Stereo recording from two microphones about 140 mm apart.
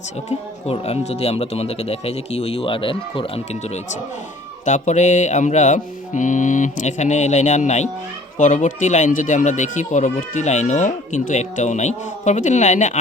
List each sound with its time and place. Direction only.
0.3 s speech: 50° left (ahead or behind)
4.6 s speech: 60° left (ahead or behind)
8.4 s speech: 65° left (ahead or behind)